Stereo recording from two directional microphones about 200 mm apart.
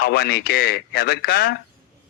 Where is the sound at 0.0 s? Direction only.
50° left (ahead or behind).